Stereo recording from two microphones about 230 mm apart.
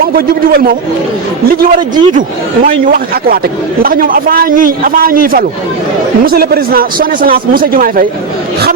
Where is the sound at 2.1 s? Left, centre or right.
Right.